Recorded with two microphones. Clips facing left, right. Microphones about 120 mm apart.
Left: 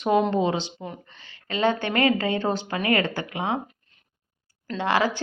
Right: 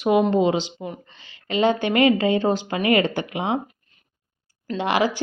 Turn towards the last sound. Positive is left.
turn(degrees=-15)  # may be behind; listen again after turning